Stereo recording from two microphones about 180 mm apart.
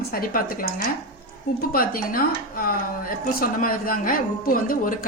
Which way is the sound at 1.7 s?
55° left (ahead or behind).